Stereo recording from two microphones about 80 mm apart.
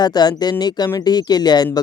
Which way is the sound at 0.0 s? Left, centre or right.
Left.